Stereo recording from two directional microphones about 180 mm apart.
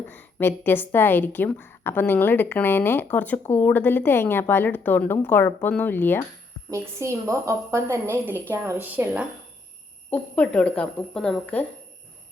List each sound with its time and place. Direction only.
0.1 s a woman's voice: 10° left (ahead or behind)
6.7 s a woman's voice: 15° right (ahead or behind)
10.1 s a woman's voice: 10° left (ahead or behind)